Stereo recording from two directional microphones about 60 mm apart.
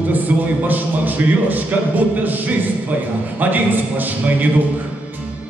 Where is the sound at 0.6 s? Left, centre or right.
Right.